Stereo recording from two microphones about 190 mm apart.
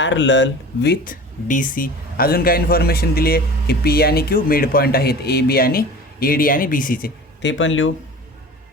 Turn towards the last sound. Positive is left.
turn(degrees=85)